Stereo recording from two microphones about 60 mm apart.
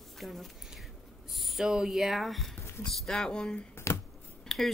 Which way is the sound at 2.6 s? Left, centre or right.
Left.